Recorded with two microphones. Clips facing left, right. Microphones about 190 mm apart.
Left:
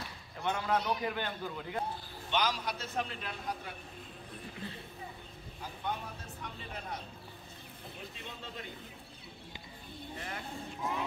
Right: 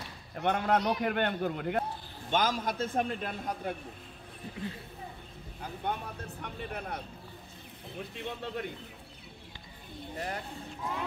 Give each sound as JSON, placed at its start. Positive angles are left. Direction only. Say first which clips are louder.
{"t": 0.4, "sound": "a man's voice", "louder": "right 5 dB", "side_deg": -60}
{"t": 2.3, "sound": "a man's voice", "louder": "right 4 dB", "side_deg": -50}
{"t": 5.6, "sound": "a man's voice", "louder": "right 3 dB", "side_deg": -60}
{"t": 8.2, "sound": "a man's voice", "louder": "right 11 dB", "side_deg": -60}
{"t": 10.1, "sound": "speech", "louder": "right 7 dB", "side_deg": -40}